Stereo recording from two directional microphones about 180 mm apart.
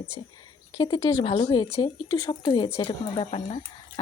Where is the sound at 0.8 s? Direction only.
20° left (ahead or behind).